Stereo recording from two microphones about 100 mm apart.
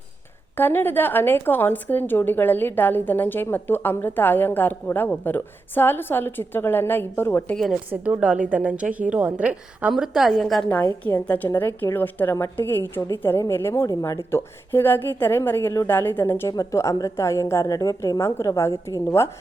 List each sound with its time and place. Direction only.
0.5 s a woman's voice: 20° left (ahead or behind)
7.5 s a woman's voice: centre (ahead or behind)
7.9 s a woman's voice: 15° right (ahead or behind); by 13.8 s 25° left (ahead or behind)
13.8 s a woman's voice: 35° left (ahead or behind); by 16.3 s 20° left (ahead or behind)
16.5 s a woman's voice: 35° left (ahead or behind)